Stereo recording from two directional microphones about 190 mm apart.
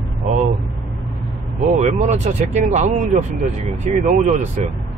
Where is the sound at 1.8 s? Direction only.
40° right (ahead or behind).